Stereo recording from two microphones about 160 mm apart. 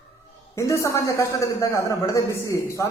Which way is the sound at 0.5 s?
20° left (ahead or behind).